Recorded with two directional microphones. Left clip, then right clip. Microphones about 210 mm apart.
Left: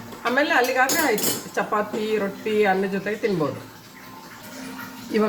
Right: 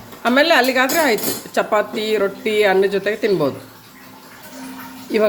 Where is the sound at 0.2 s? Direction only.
45° right (ahead or behind).